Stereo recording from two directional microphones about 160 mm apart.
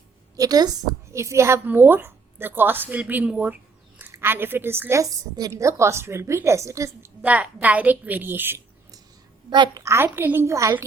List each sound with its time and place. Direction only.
0.3 s a woman's voice: 25° right (ahead or behind)
9.5 s a woman's voice: 25° right (ahead or behind)